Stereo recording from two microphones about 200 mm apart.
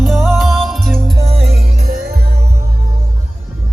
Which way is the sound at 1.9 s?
50° right (ahead or behind).